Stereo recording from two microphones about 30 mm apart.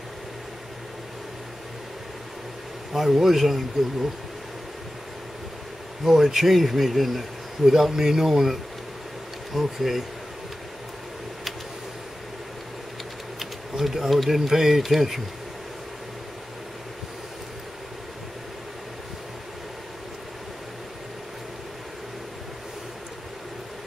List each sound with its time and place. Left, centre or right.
2.9 s speech: centre
6.0 s speech: centre
7.9 s speech: centre
13.4 s speech: centre